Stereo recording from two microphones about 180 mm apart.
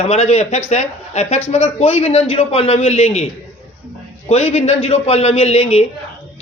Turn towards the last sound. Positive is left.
turn(degrees=35)  # may be behind; listen again after turning